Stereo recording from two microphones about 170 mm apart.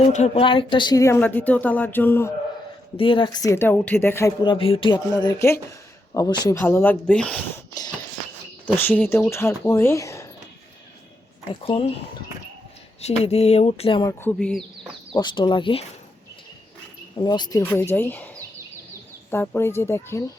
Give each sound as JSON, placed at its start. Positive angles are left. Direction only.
{"t": 0.1, "sound": "speech", "side_deg": 45}
{"t": 0.4, "sound": "speech", "side_deg": 30}
{"t": 3.0, "sound": "speech", "side_deg": 30}
{"t": 4.4, "sound": "speech", "side_deg": 30}
{"t": 8.6, "sound": "speech", "side_deg": 10}
{"t": 11.6, "sound": "speech", "side_deg": 30}
{"t": 13.0, "sound": "speech", "side_deg": 40}
{"t": 14.1, "sound": "speech", "side_deg": 10}
{"t": 15.1, "sound": "speech", "side_deg": 25}
{"t": 17.2, "sound": "speech", "side_deg": 25}
{"t": 17.6, "sound": "speech", "side_deg": 15}
{"t": 19.3, "sound": "speech", "side_deg": 15}